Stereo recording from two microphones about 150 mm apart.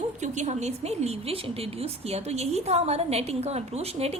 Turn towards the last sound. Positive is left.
turn(degrees=-45)  # may be behind; listen again after turning